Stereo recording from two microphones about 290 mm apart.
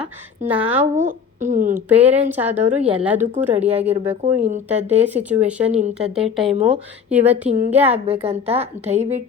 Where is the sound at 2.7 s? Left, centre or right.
Right.